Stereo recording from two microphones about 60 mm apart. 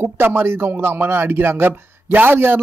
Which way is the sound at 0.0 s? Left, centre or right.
Right.